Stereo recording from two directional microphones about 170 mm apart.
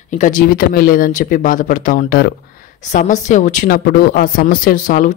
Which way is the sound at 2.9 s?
45° left (ahead or behind).